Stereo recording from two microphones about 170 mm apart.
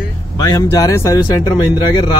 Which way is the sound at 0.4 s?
20° left (ahead or behind).